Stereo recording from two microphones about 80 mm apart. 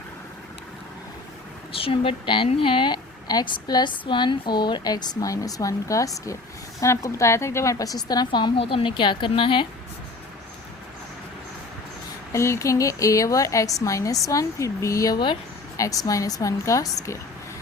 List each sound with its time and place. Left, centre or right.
1.9 s a woman's voice: left
12.3 s a woman's voice: left